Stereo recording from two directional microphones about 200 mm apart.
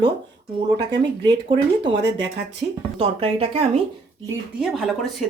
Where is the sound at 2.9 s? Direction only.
30° right (ahead or behind).